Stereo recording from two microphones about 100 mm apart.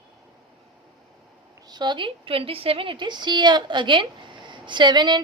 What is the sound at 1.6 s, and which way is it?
A woman's voice, 45° right (ahead or behind).